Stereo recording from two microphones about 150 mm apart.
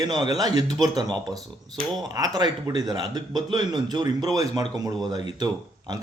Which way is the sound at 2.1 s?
25° right (ahead or behind).